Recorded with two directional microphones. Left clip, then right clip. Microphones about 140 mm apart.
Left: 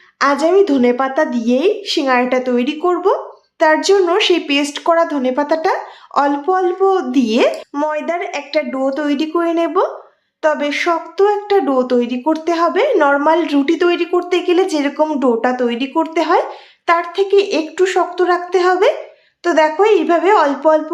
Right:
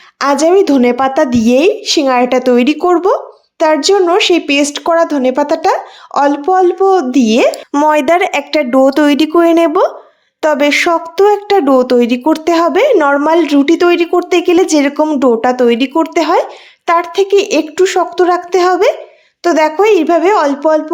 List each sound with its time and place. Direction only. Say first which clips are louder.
0.2 s speech: right 3 dB; 50° right (ahead or behind)
7.7 s speech: right 9 dB; 80° right; by 12.9 s 55° right (ahead or behind)
13.0 s speech: right 3 dB; 40° right (ahead or behind)
17.7 s speech: right 3 dB; 35° right (ahead or behind)